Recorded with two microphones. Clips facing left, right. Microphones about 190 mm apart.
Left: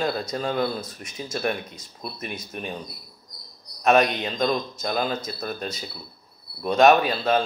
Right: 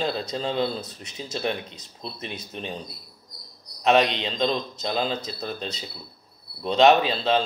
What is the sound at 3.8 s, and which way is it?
A man's voice, 25° right (ahead or behind).